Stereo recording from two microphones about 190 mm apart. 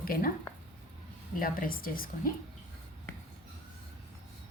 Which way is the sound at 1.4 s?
50° left (ahead or behind).